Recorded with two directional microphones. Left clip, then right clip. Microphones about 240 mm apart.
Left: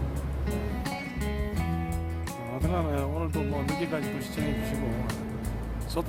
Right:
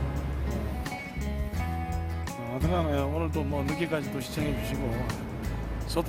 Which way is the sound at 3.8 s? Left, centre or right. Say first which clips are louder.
Right 1 dB; right.